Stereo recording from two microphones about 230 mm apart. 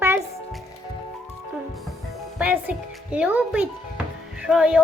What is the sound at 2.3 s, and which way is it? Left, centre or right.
A child's voice, centre.